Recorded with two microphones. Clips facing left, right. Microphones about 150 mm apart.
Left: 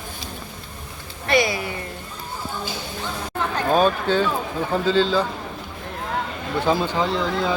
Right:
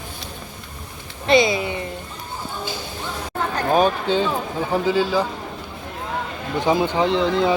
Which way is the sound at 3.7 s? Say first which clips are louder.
Even; 15° right (ahead or behind).